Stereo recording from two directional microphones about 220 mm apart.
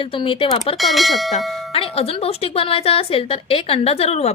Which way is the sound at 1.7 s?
25° left (ahead or behind).